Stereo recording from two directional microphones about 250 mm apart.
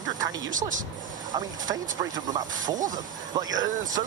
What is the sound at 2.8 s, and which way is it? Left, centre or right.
Speech, right.